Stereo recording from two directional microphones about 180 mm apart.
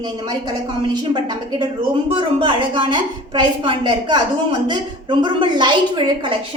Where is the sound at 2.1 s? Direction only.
25° right (ahead or behind).